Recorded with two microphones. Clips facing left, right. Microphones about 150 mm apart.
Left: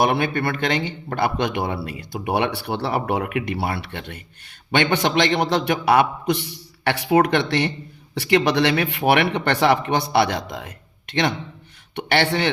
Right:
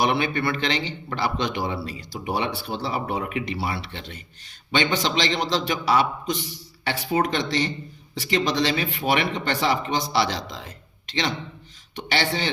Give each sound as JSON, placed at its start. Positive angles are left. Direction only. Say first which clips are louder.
{"t": 0.0, "sound": "a man's voice", "louder": "left 3 dB", "side_deg": 50}